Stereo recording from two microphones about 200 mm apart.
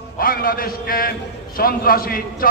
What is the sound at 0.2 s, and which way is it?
A man's voice, 45° left (ahead or behind).